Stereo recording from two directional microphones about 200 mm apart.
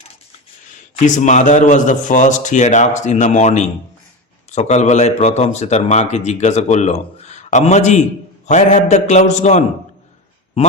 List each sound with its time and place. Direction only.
0.9 s a man's voice: 40° left (ahead or behind)